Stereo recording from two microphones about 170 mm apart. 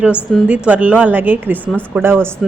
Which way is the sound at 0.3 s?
5° right (ahead or behind).